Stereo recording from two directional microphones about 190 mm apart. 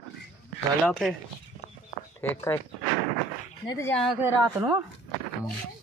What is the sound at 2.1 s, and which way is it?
Speech, 15° left (ahead or behind).